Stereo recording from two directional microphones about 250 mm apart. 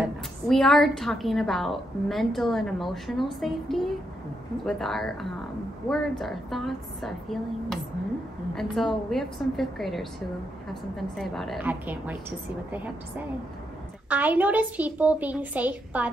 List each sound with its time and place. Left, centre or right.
0.5 s a woman's voice: centre
14.0 s a woman's voice: centre